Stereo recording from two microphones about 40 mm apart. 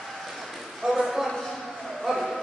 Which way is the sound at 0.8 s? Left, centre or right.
Centre.